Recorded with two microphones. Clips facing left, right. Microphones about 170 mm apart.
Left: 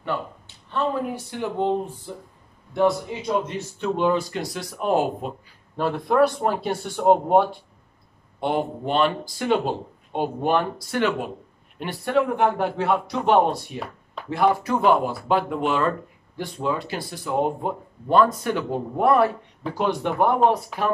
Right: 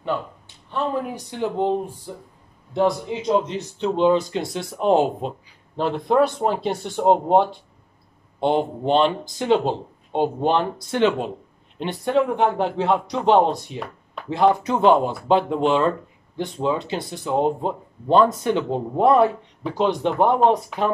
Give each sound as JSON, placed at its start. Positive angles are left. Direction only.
{"t": 0.7, "sound": "speech", "side_deg": -15}